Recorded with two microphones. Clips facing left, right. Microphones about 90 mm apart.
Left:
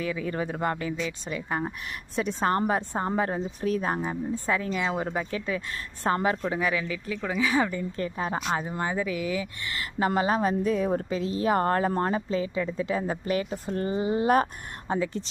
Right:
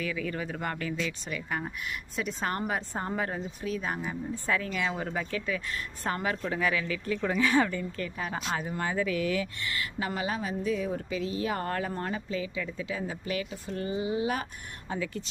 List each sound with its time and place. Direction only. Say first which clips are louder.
0.0 s speech: left 4 dB; 30° left (ahead or behind)
3.6 s speech: left 6 dB; 40° left (ahead or behind); by 7.0 s 20° left (ahead or behind)
7.1 s speech: right 1 dB; 5° left (ahead or behind)
7.7 s speech: left 3 dB; 25° left (ahead or behind)
9.7 s a woman's voice: left 8 dB; 40° left (ahead or behind)
14.8 s a woman's voice: left 6 dB; 30° left (ahead or behind)